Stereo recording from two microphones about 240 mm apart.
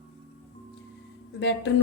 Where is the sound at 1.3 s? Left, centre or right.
Left.